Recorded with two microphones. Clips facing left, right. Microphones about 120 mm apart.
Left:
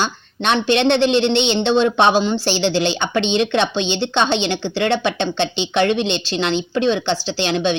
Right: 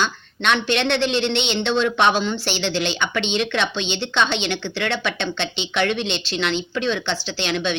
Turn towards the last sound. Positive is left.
turn(degrees=30)  # may be behind; listen again after turning